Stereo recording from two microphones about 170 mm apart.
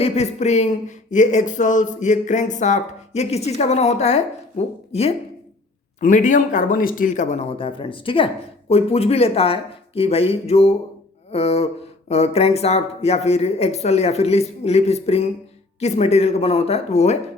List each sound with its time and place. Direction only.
0.0 s speech: 40° left (ahead or behind)